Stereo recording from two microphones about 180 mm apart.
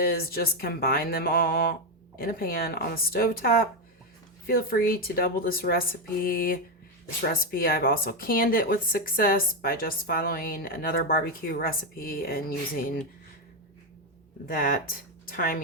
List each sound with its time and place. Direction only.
0.0 s speech: 55° left (ahead or behind)
14.4 s speech: 55° left (ahead or behind)